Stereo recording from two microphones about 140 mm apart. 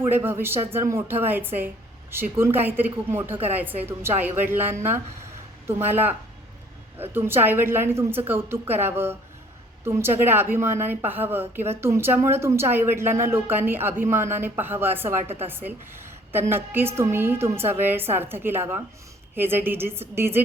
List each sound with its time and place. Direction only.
0.1 s a woman's voice: 15° right (ahead or behind)